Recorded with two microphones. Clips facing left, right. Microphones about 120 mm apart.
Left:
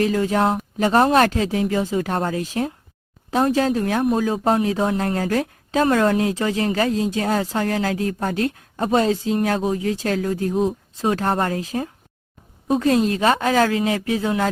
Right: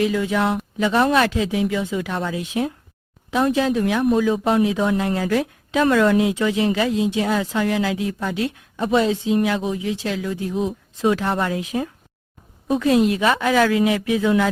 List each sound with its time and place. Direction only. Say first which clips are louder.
0.0 s a woman's voice: left 1 dB; 40° left (ahead or behind)